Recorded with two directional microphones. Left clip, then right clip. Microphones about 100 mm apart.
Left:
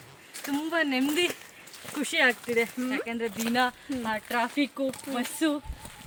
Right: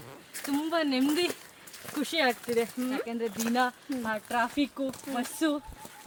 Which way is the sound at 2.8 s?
10° right (ahead or behind).